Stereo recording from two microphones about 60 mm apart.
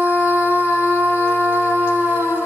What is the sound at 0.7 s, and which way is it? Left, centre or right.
Humming, left.